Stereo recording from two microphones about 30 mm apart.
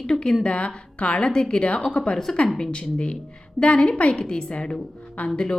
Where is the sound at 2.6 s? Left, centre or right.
Left.